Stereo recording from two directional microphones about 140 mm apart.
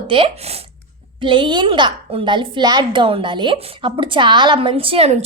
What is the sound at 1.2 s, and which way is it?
A woman's voice, 35° right (ahead or behind).